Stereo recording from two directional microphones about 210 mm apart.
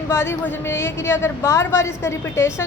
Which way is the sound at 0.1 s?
10° left (ahead or behind).